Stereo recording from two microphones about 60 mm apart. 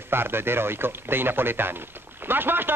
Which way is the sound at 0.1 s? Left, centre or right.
Right.